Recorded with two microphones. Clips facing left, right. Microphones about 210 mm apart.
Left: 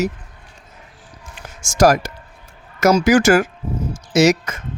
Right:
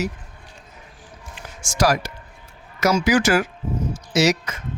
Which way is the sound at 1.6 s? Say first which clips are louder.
Left 6 dB; 45° left (ahead or behind).